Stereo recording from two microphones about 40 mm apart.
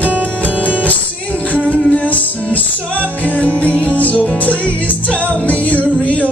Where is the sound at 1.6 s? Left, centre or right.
Left.